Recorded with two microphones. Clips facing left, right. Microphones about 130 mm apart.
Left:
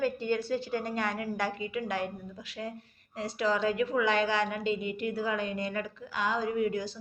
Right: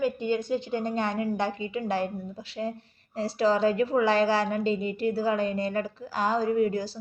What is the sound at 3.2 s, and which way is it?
A woman's voice, 30° right (ahead or behind).